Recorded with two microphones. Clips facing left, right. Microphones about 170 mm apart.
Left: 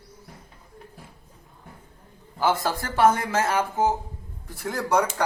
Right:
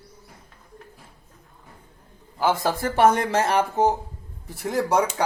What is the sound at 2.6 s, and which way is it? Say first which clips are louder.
Speech: right 3 dB; 20° right (ahead or behind).